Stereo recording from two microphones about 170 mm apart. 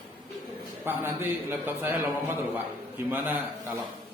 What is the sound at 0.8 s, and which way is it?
A man's voice, 15° right (ahead or behind).